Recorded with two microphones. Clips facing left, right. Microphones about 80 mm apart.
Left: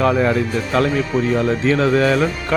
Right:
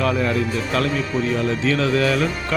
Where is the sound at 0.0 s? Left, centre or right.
Left.